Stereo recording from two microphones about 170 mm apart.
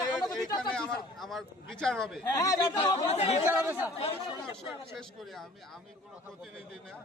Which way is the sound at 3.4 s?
10° right (ahead or behind).